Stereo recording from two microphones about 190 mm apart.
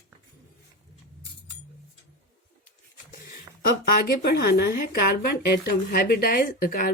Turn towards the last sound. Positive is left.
turn(degrees=50)  # may be behind; listen again after turning